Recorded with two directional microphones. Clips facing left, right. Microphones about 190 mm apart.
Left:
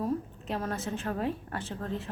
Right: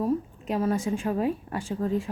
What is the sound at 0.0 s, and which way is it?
A woman's voice, 10° right (ahead or behind).